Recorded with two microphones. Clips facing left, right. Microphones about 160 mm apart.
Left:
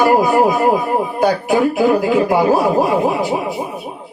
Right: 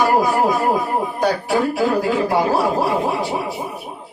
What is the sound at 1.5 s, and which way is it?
Speech, 20° left (ahead or behind).